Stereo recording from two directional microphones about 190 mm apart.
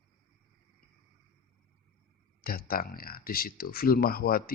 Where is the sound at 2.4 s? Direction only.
50° left (ahead or behind).